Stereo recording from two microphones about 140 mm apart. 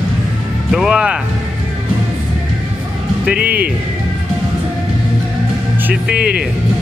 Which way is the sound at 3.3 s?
90° right.